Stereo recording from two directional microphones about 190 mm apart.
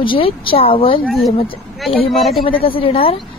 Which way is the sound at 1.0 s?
Centre (ahead or behind).